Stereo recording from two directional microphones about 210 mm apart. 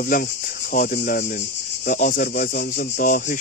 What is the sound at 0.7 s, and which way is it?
Speech, 40° left (ahead or behind).